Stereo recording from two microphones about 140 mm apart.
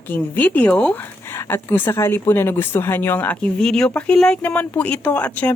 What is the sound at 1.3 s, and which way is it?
Speech, 20° left (ahead or behind).